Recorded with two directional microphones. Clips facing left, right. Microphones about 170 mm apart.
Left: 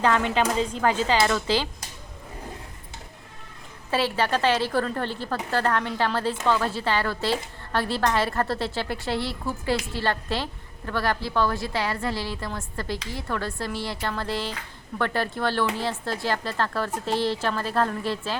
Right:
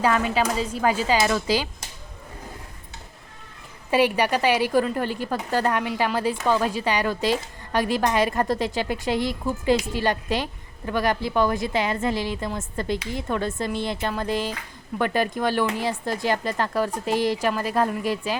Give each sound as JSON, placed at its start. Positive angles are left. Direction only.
{"t": 0.0, "sound": "a woman's voice", "side_deg": -5}
{"t": 3.9, "sound": "a woman's voice", "side_deg": -15}